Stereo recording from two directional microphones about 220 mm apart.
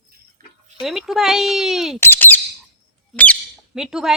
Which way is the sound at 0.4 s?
40° right (ahead or behind).